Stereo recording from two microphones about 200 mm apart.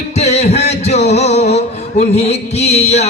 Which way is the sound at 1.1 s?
35° left (ahead or behind).